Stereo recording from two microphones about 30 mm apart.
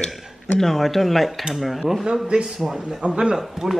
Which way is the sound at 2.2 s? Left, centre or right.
Right.